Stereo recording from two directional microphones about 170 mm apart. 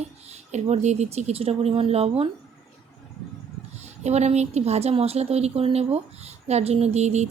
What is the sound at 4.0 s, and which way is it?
A woman's voice, 40° right (ahead or behind).